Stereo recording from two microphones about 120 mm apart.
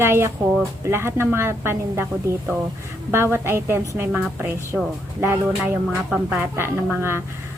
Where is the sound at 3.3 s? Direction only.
20° right (ahead or behind).